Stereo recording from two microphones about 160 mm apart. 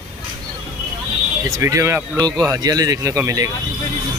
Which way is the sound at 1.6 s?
15° right (ahead or behind).